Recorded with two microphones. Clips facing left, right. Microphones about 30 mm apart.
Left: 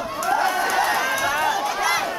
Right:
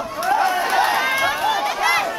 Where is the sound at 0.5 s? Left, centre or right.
Right.